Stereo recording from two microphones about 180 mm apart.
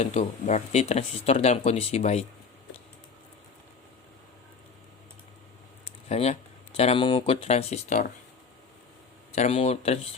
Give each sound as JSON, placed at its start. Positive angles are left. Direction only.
{"t": 0.0, "sound": "speech", "side_deg": 40}
{"t": 6.1, "sound": "speech", "side_deg": 35}
{"t": 9.3, "sound": "speech", "side_deg": 35}